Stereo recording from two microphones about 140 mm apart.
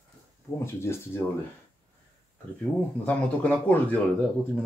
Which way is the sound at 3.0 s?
10° left (ahead or behind).